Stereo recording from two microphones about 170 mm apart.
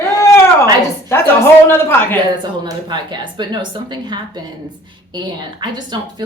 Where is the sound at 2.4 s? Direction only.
25° right (ahead or behind).